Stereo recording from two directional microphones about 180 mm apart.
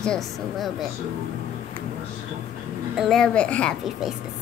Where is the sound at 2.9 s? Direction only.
Centre (ahead or behind).